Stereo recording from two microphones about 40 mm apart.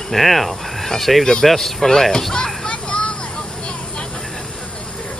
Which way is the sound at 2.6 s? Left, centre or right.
Left.